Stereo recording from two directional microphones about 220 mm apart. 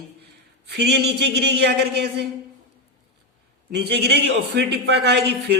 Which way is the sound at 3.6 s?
50° right (ahead or behind).